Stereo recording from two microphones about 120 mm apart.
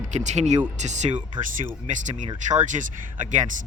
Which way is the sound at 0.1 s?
80° right.